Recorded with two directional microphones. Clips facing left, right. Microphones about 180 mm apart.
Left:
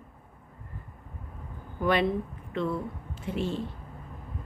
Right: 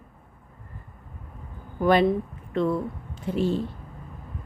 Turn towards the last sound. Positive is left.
turn(degrees=-40)  # may be behind; listen again after turning